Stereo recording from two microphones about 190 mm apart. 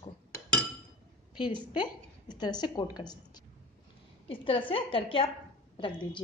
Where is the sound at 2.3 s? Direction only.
20° left (ahead or behind).